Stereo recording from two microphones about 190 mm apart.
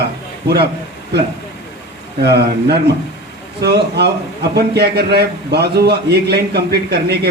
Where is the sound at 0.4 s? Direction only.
60° right (ahead or behind).